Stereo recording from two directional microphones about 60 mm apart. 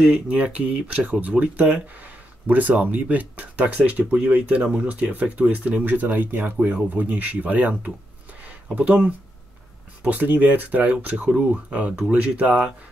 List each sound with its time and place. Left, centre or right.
0.0 s speech: centre
8.7 s speech: right